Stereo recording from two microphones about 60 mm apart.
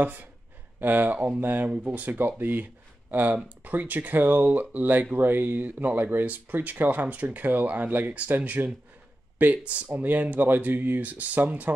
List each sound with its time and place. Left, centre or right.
0.0 s speech: right